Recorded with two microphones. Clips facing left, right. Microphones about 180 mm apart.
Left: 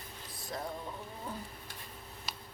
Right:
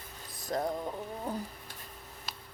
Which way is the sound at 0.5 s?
40° right (ahead or behind).